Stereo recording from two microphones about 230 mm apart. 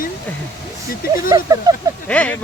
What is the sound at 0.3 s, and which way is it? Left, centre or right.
Speech, centre.